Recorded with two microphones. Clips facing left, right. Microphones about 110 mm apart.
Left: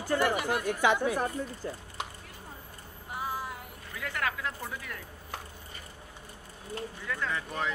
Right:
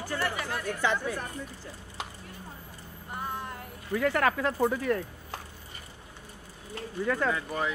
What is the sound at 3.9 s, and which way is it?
Speech, 45° right (ahead or behind).